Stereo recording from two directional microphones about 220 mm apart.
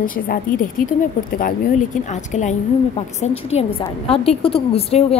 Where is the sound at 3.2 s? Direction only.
30° left (ahead or behind).